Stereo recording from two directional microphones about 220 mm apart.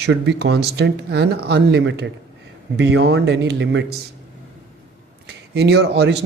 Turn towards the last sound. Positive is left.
turn(degrees=-50)  # may be behind; listen again after turning